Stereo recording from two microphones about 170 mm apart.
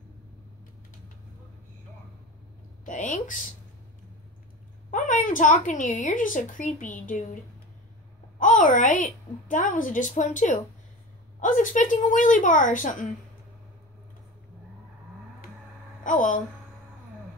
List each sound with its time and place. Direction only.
2.8 s speech: 50° left (ahead or behind)
4.9 s speech: 45° left (ahead or behind)
8.4 s speech: 50° left (ahead or behind)
16.0 s a woman's voice: 50° left (ahead or behind)